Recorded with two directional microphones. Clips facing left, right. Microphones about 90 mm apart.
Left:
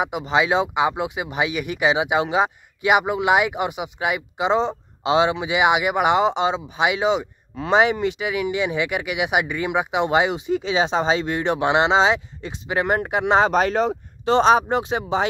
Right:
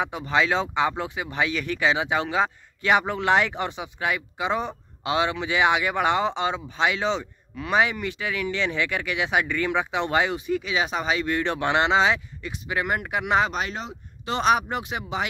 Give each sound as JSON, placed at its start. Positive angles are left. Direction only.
{"t": 0.0, "sound": "speech", "side_deg": 20}
{"t": 7.5, "sound": "speech", "side_deg": 25}
{"t": 13.5, "sound": "speech", "side_deg": 45}
{"t": 14.3, "sound": "speech", "side_deg": 30}